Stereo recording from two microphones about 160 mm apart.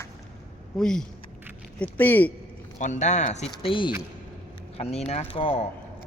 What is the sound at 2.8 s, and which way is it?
Speech, 50° left (ahead or behind).